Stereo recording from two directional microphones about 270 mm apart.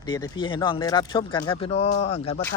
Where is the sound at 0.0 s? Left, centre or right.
Centre.